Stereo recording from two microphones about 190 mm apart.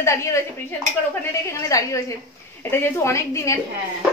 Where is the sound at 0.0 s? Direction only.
15° left (ahead or behind).